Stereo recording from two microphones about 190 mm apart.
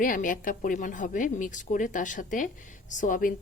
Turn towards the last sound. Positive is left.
turn(degrees=45)  # may be behind; listen again after turning